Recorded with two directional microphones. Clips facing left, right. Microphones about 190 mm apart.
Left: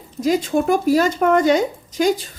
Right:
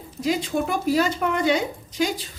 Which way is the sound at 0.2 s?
45° left (ahead or behind).